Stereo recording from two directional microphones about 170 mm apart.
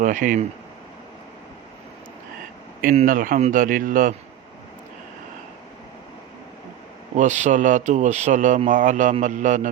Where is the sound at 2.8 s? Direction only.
55° right (ahead or behind).